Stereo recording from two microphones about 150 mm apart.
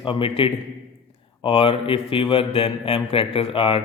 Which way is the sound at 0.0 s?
35° left (ahead or behind).